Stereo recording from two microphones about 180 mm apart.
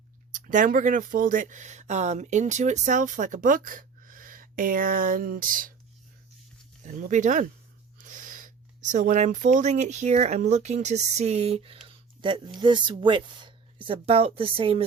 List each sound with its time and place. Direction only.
0.3 s speech: 45° right (ahead or behind)
6.8 s speech: 45° right (ahead or behind)